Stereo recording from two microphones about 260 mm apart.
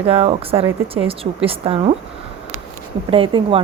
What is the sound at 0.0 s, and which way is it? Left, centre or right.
Speech, right.